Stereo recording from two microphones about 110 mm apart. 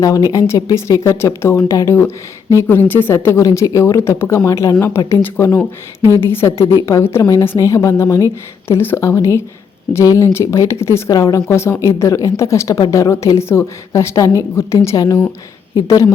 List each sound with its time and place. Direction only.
0.3 s speech: 30° left (ahead or behind)